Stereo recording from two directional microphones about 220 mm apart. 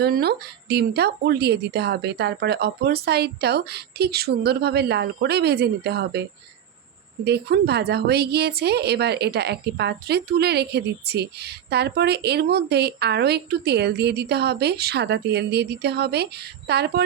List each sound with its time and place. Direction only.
0.0 s speech: 45° right (ahead or behind)
7.3 s speech: 50° right (ahead or behind)